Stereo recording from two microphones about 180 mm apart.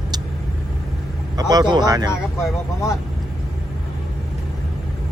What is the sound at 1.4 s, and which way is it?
Speech, 20° right (ahead or behind).